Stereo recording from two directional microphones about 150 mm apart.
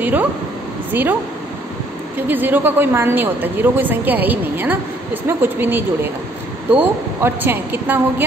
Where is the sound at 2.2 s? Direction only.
15° right (ahead or behind).